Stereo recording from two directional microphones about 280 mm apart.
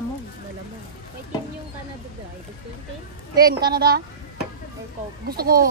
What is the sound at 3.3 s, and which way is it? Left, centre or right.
Speech, right.